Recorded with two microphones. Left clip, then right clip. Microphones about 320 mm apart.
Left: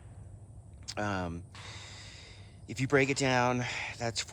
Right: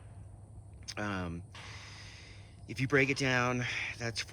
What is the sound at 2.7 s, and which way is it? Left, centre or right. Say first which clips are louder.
Speech: left 1 dB; centre.